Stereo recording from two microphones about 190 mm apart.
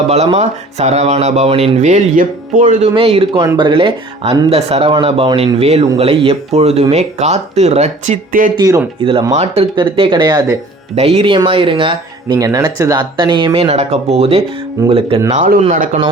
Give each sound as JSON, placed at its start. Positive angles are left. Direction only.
{"t": 0.1, "sound": "speech", "side_deg": -35}
{"t": 2.9, "sound": "speech", "side_deg": -30}
{"t": 8.5, "sound": "speech", "side_deg": -15}
{"t": 9.0, "sound": "speech", "side_deg": -30}